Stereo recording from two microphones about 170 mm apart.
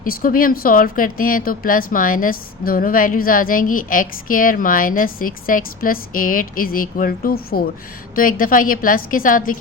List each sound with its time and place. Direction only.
0.0 s a woman's voice: 55° left (ahead or behind)